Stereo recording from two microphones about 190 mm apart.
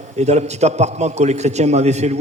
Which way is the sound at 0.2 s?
35° right (ahead or behind).